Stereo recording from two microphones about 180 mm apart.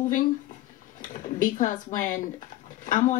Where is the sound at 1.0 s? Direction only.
45° left (ahead or behind).